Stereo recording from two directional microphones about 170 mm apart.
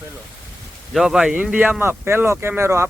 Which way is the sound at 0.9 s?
Centre (ahead or behind).